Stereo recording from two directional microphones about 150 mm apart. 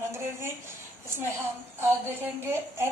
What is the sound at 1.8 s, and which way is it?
A woman's voice, 15° right (ahead or behind).